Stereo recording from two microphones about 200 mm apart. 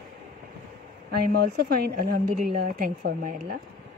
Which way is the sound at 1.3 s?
50° right (ahead or behind).